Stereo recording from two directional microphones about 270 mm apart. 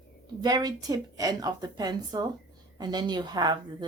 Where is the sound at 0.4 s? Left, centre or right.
Centre.